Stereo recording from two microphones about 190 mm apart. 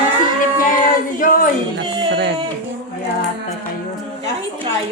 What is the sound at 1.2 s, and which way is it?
Speech, 45° left (ahead or behind).